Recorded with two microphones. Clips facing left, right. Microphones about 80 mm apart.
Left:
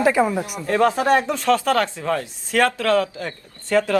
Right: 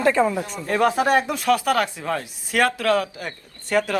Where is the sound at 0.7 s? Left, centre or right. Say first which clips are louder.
Left 1 dB; right.